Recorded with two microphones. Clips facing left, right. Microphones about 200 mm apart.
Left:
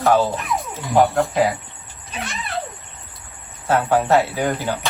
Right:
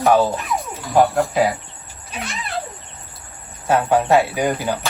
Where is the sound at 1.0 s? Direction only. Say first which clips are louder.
Even; centre (ahead or behind).